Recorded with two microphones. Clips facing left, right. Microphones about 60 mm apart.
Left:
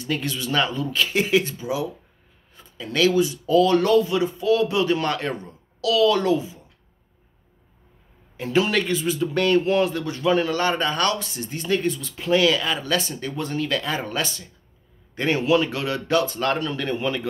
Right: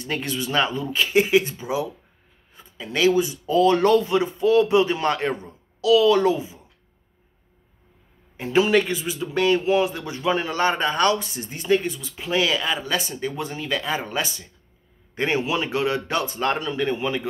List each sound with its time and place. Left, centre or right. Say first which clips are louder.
0.0 s speech: even; right
1.6 s speech: even; right
8.4 s speech: right 2 dB; centre